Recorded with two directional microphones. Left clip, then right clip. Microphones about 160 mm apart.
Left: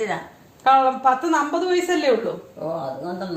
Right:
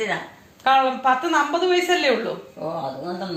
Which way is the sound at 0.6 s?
85° left.